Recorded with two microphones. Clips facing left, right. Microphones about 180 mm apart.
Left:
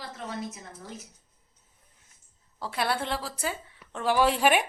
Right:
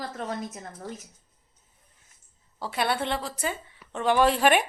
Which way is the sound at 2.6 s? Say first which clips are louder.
Right 2 dB; centre (ahead or behind).